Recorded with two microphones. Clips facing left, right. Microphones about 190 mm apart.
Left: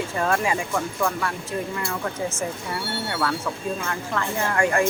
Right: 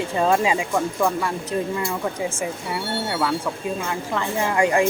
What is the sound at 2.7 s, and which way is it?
Speech, 15° right (ahead or behind).